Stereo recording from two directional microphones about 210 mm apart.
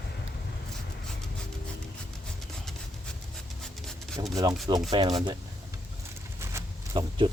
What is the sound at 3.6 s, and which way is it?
Rub, centre (ahead or behind).